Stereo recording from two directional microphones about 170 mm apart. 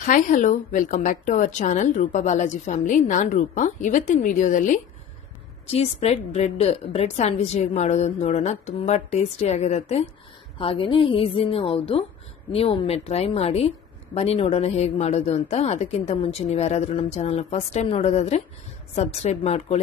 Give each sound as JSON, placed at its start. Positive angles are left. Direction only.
{"t": 0.0, "sound": "speech", "side_deg": 50}
{"t": 5.7, "sound": "a woman's voice", "side_deg": 35}